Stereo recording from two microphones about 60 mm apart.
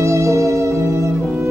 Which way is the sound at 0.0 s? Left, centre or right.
Right.